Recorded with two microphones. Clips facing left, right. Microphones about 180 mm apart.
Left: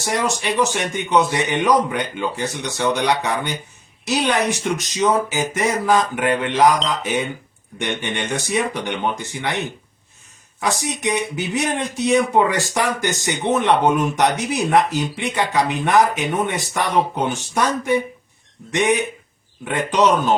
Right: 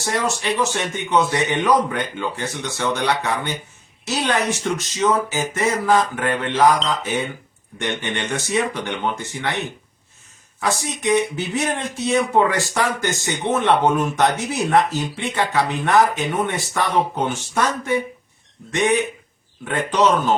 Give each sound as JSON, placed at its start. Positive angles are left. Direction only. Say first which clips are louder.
{"t": 0.6, "sound": "speech", "louder": "left 2 dB", "side_deg": 15}
{"t": 10.6, "sound": "speech", "louder": "left 1 dB", "side_deg": 15}